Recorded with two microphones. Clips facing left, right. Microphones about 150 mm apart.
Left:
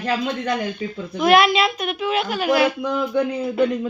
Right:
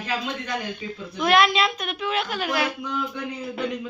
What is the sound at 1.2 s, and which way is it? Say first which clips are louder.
A woman's voice: left 4 dB; 5° left (ahead or behind).